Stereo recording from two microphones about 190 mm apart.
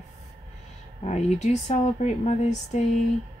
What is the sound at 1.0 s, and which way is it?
Speech, 35° left (ahead or behind).